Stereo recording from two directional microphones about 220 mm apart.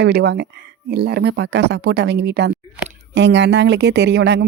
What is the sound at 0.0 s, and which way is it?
Speech, 50° right (ahead or behind).